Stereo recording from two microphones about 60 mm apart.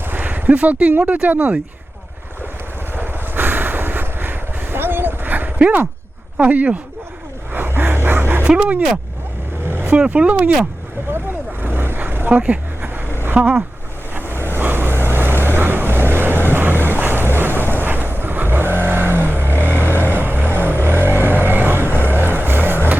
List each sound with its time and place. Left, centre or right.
0.1 s speech: right
2.9 s vehicle: right
6.3 s speech: right
7.5 s gasp: right
8.4 s speech: centre
9.6 s vehicle: right
10.1 s speech: right
11.6 s vehicle: right
12.3 s speech: right
13.2 s vehicle: right
17.3 s wind noise: right
17.7 s vehicle: right